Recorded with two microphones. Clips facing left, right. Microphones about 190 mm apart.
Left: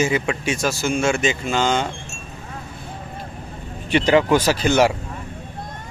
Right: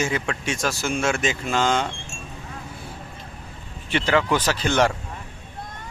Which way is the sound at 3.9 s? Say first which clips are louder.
Left 5 dB; 15° left (ahead or behind).